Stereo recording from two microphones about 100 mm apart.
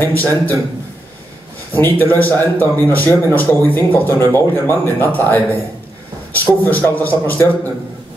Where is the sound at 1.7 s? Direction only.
20° left (ahead or behind).